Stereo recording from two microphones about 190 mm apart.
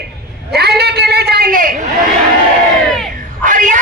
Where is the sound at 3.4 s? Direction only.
40° right (ahead or behind).